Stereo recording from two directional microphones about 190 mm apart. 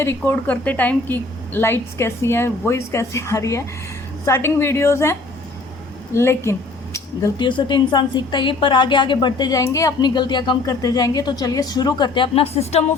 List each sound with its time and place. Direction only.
0.0 s a woman's voice: 10° left (ahead or behind)
6.1 s speech: 15° left (ahead or behind); by 12.8 s 30° left (ahead or behind)